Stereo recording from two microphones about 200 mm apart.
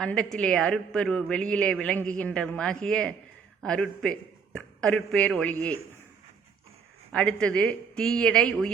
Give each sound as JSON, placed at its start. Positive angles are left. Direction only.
{"t": 0.0, "sound": "a man's voice", "side_deg": 5}
{"t": 7.1, "sound": "a man's voice", "side_deg": 5}